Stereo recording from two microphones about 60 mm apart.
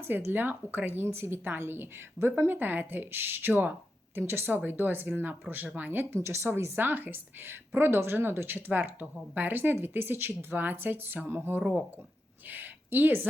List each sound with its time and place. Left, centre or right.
0.0 s speech: right
6.1 s speech: right